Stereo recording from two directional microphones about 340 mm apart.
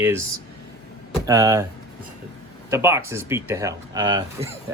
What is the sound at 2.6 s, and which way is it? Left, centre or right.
Speech, centre.